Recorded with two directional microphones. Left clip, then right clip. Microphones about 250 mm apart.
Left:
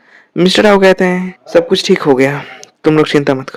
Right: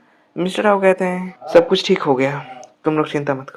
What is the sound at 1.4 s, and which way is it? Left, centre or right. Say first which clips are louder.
Speech: left 2 dB; left.